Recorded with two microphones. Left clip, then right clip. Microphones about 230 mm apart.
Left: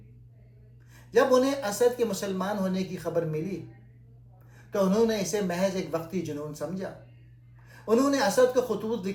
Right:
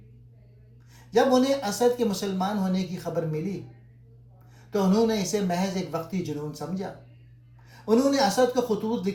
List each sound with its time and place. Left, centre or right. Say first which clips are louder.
1.1 s speech: right 1 dB; right
5.0 s speech: right 1 dB; right
7.9 s speech: right 2 dB; right